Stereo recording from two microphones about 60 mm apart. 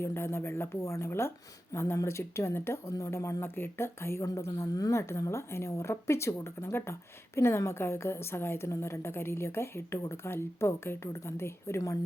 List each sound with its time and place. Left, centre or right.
0.0 s a woman's voice: left